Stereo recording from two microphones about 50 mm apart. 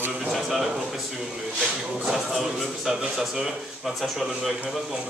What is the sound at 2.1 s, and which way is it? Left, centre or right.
A man's voice, centre.